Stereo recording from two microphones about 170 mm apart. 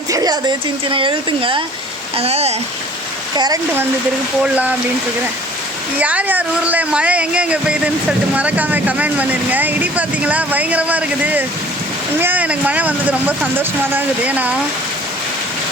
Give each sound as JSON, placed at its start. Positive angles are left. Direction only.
{"t": 0.1, "sound": "speech", "side_deg": -20}
{"t": 3.3, "sound": "speech", "side_deg": -25}
{"t": 4.5, "sound": "speech", "side_deg": -10}
{"t": 6.0, "sound": "speech", "side_deg": -10}